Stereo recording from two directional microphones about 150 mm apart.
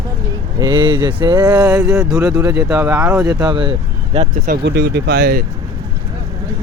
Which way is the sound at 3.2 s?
30° right (ahead or behind).